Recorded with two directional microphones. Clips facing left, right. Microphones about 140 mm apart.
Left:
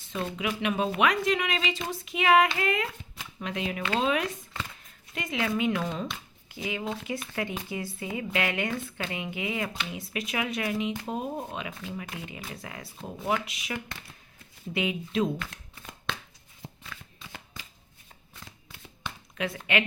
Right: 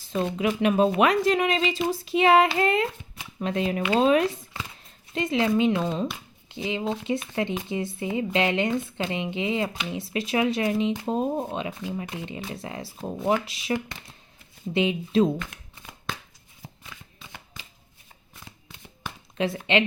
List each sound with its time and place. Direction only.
0.0 s speech: 35° right (ahead or behind)
19.5 s speech: 25° right (ahead or behind)